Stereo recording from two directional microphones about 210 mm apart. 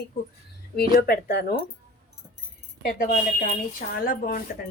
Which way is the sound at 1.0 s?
50° left (ahead or behind).